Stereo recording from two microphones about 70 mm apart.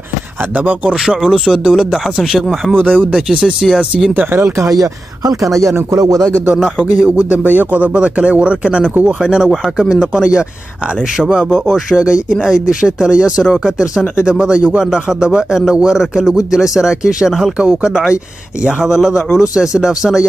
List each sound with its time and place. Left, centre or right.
0.6 s a man's voice: centre
1.0 s speech: centre
2.7 s speech: right
3.3 s a man's voice: centre
4.1 s speech: right
4.6 s speech: right
7.0 s a man's voice: centre